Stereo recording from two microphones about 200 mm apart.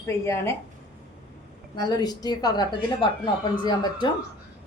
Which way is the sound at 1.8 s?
20° left (ahead or behind).